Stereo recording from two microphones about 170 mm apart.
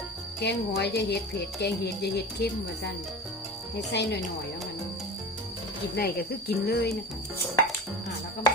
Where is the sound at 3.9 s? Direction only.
90° left.